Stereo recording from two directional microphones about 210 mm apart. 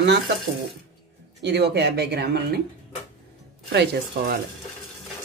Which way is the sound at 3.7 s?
55° right (ahead or behind).